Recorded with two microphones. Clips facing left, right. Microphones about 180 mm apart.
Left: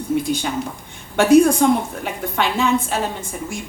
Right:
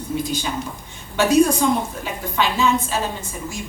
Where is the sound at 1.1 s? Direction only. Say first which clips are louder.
Left 4 dB; 60° left (ahead or behind).